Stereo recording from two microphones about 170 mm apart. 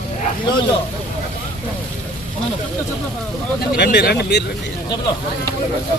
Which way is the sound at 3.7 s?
75° left (ahead or behind).